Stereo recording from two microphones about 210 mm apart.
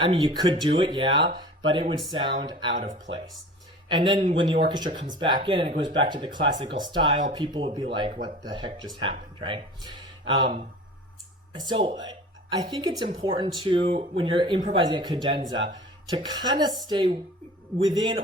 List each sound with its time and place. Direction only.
0.0 s speech: 20° right (ahead or behind)
1.4 s a sound: 25° right (ahead or behind)
2.0 s speech: 20° right (ahead or behind)
2.7 s speech: 35° right (ahead or behind)
3.8 s speech: 20° right (ahead or behind)
11.7 s speech: 30° right (ahead or behind)